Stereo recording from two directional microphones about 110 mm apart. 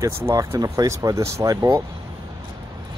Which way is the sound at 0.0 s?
30° right (ahead or behind).